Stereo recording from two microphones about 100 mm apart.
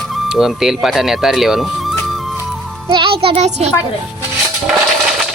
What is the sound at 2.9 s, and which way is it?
Speech, 60° right (ahead or behind).